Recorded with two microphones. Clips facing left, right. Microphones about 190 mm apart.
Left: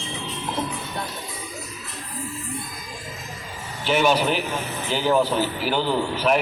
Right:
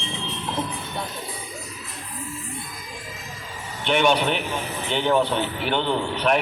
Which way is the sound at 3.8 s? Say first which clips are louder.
Even; 5° left (ahead or behind).